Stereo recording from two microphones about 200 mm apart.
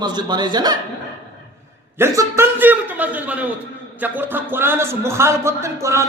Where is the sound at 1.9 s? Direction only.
10° right (ahead or behind).